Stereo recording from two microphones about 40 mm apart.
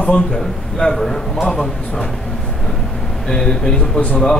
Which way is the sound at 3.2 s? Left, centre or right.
Centre.